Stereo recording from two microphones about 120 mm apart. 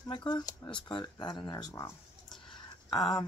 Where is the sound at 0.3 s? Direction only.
35° left (ahead or behind).